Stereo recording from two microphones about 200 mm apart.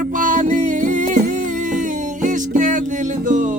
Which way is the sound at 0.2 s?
40° right (ahead or behind).